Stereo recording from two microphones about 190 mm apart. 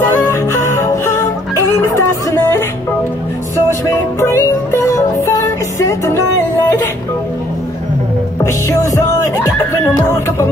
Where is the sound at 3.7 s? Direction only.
15° left (ahead or behind).